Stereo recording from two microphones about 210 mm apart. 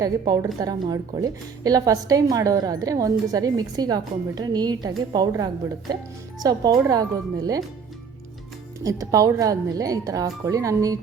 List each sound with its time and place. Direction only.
0.0 s a woman's voice: 20° right (ahead or behind)
8.8 s a woman's voice: 15° right (ahead or behind)